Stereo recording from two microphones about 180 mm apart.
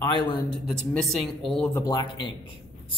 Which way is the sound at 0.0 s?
25° left (ahead or behind).